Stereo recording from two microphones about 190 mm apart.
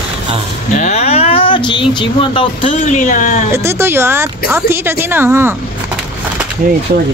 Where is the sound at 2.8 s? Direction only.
40° left (ahead or behind).